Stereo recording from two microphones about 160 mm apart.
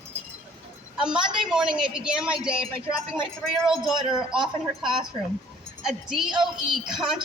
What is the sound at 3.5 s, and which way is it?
Speech, centre (ahead or behind).